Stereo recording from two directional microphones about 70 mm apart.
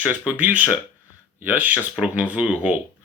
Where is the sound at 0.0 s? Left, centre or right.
Right.